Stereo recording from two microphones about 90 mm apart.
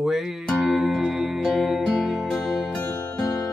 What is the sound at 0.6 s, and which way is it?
Music, centre (ahead or behind).